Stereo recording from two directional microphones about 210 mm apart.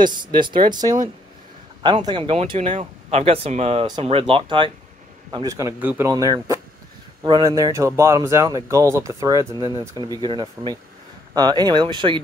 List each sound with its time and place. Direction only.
0.0 s speech: 20° right (ahead or behind)